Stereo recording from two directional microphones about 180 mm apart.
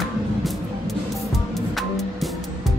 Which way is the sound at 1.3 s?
Centre (ahead or behind).